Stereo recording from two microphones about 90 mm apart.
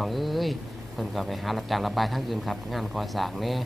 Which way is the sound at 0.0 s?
Centre (ahead or behind).